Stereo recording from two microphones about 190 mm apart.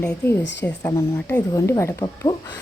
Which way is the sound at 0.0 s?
5° left (ahead or behind).